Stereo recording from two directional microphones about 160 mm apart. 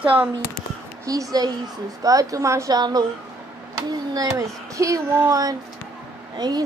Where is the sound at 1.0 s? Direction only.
20° right (ahead or behind).